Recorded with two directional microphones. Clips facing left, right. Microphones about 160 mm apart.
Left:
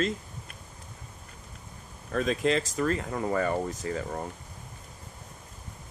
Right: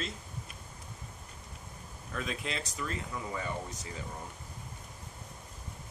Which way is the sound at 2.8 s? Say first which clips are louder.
Left 10 dB; 55° left (ahead or behind).